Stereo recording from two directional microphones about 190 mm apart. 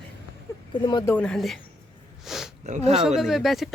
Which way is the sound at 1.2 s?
5° left (ahead or behind).